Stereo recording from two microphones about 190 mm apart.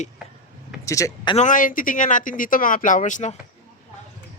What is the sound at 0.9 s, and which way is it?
Speech, 15° left (ahead or behind).